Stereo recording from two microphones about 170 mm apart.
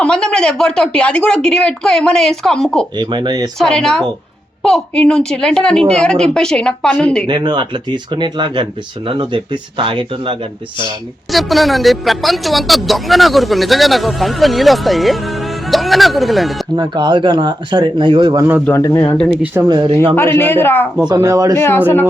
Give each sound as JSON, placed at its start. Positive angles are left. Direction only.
{"t": 0.0, "sound": "speech", "side_deg": 5}
{"t": 2.9, "sound": "speech", "side_deg": -25}
{"t": 3.6, "sound": "speech", "side_deg": 5}
{"t": 7.3, "sound": "speech", "side_deg": -25}
{"t": 11.3, "sound": "speech", "side_deg": 0}
{"t": 16.7, "sound": "speech", "side_deg": -25}
{"t": 18.6, "sound": "speech", "side_deg": 15}
{"t": 19.3, "sound": "speech", "side_deg": -5}
{"t": 19.6, "sound": "speech", "side_deg": -25}
{"t": 20.1, "sound": "speech", "side_deg": 15}
{"t": 21.1, "sound": "speech", "side_deg": -20}
{"t": 21.5, "sound": "speech", "side_deg": 15}